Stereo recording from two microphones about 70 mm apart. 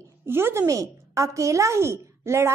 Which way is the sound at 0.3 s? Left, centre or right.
Right.